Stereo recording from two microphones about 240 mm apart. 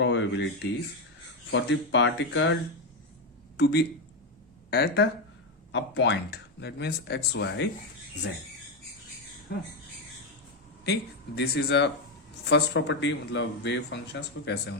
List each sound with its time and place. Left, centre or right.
0.0 s speech: left
3.6 s speech: left
11.3 s speech: left